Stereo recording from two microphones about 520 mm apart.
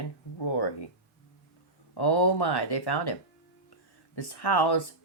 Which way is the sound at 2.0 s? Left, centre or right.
Left.